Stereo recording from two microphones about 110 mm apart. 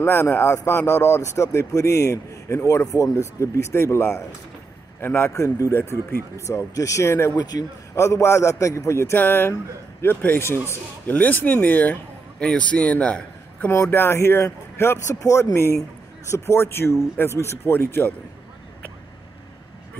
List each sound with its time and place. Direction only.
0.0 s a man's voice: 20° left (ahead or behind)